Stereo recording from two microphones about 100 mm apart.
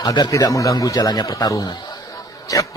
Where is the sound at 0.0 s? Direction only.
40° left (ahead or behind).